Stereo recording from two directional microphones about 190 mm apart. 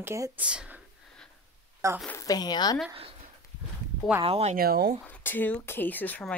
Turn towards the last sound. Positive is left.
turn(degrees=5)  # may be behind; listen again after turning